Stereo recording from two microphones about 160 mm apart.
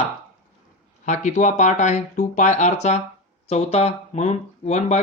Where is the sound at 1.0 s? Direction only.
50° left (ahead or behind).